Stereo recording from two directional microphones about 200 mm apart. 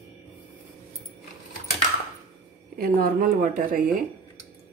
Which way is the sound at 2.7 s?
45° right (ahead or behind).